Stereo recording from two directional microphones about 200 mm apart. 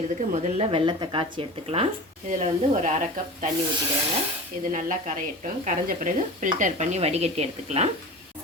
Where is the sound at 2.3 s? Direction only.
40° right (ahead or behind).